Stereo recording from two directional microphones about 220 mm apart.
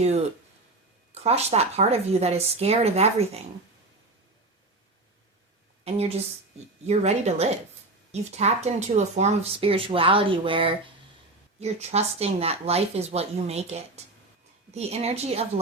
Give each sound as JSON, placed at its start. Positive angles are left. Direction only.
{"t": 1.1, "sound": "speech", "side_deg": -30}
{"t": 6.8, "sound": "speech", "side_deg": -30}